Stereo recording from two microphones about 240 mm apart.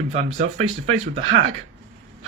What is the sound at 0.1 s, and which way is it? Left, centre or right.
Speech, right.